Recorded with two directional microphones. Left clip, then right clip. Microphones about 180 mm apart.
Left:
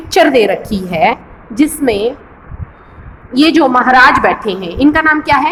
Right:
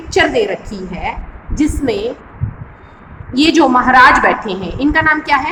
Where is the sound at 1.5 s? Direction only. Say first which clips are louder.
Left 4 dB; 25° left (ahead or behind).